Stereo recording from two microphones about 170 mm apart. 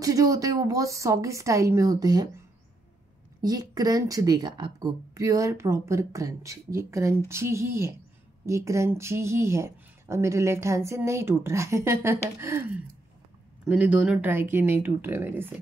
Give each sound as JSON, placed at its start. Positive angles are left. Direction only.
{"t": 0.0, "sound": "speech", "side_deg": -20}
{"t": 3.3, "sound": "speech", "side_deg": -20}
{"t": 13.7, "sound": "speech", "side_deg": -5}